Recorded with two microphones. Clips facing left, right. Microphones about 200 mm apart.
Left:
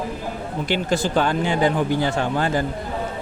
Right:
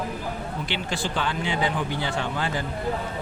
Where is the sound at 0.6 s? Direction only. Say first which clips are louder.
Left 10 dB; 45° left (ahead or behind).